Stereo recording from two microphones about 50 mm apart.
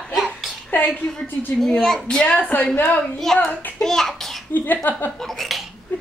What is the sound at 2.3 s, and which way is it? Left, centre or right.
Speech, left.